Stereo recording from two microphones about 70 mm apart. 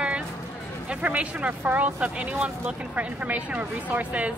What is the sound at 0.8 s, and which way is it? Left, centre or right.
Speech, centre.